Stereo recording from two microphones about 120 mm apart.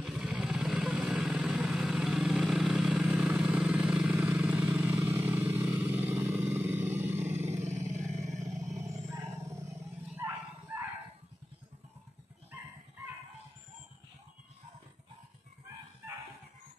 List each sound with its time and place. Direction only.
0.0 s vehicle: 5° right (ahead or behind); by 7.6 s 20° right (ahead or behind)
7.6 s vehicle: 75° right (ahead or behind)
8.7 s a sound: 25° right (ahead or behind)
10.1 s bow-wow: 15° right (ahead or behind)